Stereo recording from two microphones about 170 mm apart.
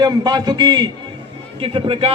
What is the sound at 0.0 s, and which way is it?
A man's voice, 25° right (ahead or behind).